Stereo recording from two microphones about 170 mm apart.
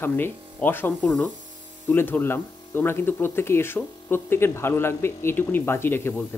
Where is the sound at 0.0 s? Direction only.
10° left (ahead or behind).